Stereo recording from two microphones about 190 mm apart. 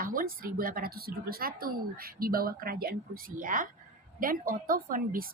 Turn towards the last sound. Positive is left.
turn(degrees=-50)  # may be behind; listen again after turning